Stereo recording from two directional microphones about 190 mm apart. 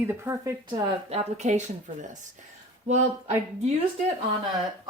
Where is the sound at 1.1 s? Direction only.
40° right (ahead or behind).